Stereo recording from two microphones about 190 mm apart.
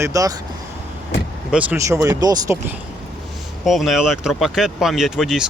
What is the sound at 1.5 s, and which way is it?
Speech, 5° right (ahead or behind).